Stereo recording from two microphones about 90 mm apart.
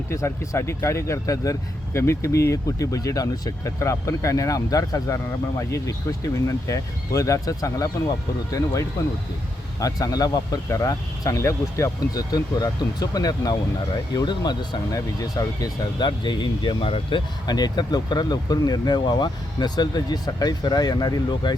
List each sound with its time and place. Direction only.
0.1 s speech: 30° left (ahead or behind); by 14.8 s 55° left (ahead or behind)
14.9 s speech: 40° left (ahead or behind); by 17.5 s 70° left (ahead or behind)
17.5 s speech: 50° left (ahead or behind)